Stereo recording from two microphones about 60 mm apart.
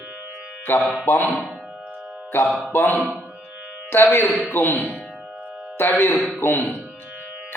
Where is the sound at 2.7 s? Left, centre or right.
Left.